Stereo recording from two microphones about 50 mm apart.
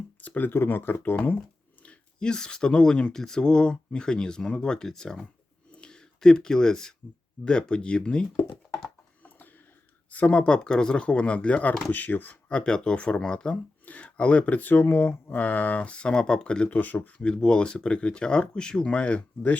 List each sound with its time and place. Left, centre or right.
0.2 s a sound: left
0.5 s speech: left
1.8 s speech: centre
5.7 s a sound: centre
7.4 s speech: centre
10.1 s speech: left
10.4 s speech: centre
12.6 s speech: centre; by 15.8 s left
15.8 s speech: left
16.7 s speech: left
17.2 s speech: centre